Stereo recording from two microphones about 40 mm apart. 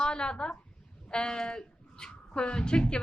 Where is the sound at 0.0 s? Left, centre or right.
Left.